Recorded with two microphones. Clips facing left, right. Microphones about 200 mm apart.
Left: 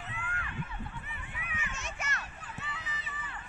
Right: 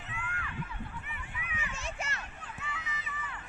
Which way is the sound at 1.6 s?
30° right (ahead or behind).